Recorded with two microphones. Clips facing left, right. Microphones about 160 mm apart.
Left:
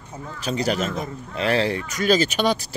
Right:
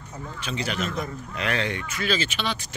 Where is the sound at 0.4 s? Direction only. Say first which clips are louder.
Left 6 dB; 40° left (ahead or behind).